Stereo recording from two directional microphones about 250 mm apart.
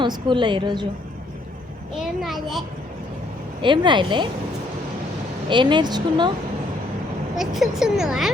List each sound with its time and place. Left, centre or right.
0.0 s a woman's voice: centre
2.0 s speech: centre
3.6 s speech: centre
5.5 s a woman's voice: centre
7.3 s speech: centre